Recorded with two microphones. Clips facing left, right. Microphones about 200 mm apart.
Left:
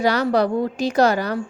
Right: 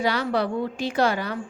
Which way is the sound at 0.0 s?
40° left (ahead or behind).